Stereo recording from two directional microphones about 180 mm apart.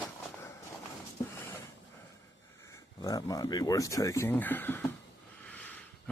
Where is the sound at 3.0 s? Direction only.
20° left (ahead or behind).